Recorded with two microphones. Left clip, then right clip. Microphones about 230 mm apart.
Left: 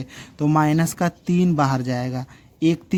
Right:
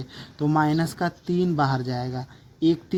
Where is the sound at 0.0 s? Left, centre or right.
Left.